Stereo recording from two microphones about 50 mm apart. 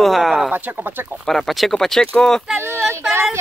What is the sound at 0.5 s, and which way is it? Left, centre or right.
Speech, right.